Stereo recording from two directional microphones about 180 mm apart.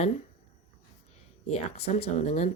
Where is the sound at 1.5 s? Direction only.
35° left (ahead or behind).